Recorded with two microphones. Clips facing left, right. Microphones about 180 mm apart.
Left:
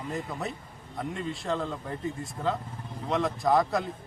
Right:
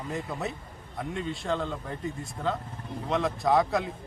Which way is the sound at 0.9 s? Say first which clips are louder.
Even; centre (ahead or behind).